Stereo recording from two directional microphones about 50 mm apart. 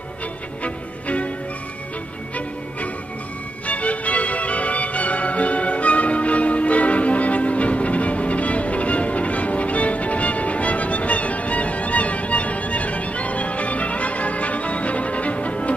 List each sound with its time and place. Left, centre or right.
0.7 s music: left
3.6 s music: left